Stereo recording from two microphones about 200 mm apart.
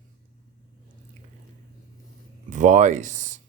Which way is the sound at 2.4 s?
40° right (ahead or behind).